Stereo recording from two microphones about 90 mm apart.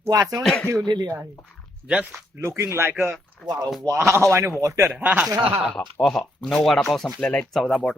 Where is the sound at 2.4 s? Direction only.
30° right (ahead or behind).